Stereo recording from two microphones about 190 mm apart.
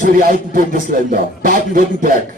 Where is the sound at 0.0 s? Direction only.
45° right (ahead or behind).